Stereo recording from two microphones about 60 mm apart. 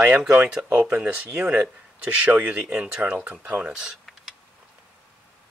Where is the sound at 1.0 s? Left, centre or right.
Right.